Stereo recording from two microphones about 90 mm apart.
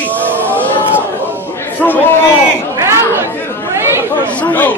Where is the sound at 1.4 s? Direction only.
25° left (ahead or behind).